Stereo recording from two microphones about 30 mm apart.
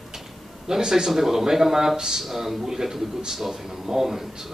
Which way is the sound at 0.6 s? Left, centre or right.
Centre.